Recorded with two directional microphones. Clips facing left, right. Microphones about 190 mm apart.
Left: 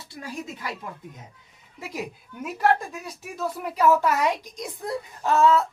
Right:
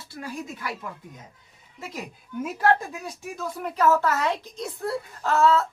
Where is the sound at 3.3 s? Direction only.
10° left (ahead or behind).